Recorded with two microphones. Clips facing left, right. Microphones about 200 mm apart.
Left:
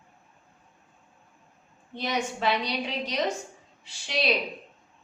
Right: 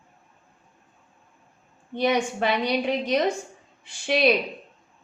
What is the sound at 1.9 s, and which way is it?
A woman's voice, 55° right (ahead or behind).